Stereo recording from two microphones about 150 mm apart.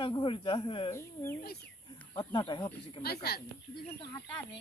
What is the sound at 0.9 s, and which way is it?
Speech, 20° left (ahead or behind).